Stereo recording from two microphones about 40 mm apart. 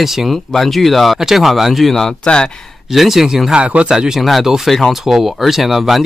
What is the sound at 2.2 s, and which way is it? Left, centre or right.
Speech, left.